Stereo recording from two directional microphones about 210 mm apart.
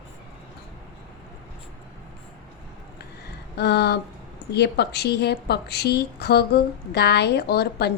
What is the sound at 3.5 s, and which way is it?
A woman's voice, 50° left (ahead or behind).